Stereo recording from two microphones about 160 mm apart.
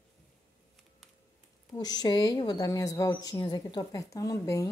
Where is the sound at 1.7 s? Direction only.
25° left (ahead or behind).